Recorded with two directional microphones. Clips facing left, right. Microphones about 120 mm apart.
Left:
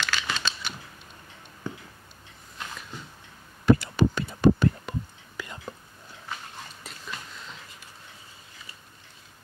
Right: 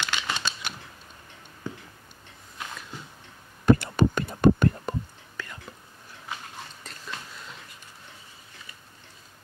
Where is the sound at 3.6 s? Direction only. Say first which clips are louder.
Even; 50° right (ahead or behind).